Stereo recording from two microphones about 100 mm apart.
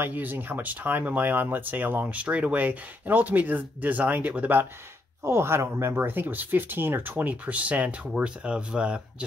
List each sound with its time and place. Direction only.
0.0 s speech: 20° right (ahead or behind)